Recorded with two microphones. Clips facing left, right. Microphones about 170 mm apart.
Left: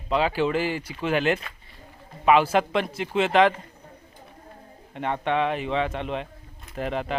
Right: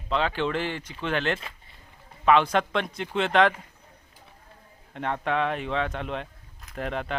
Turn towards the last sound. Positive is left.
turn(degrees=0)  # may be behind; listen again after turning